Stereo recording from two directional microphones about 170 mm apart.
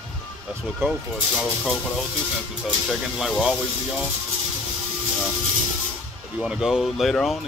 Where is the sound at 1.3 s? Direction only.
5° left (ahead or behind).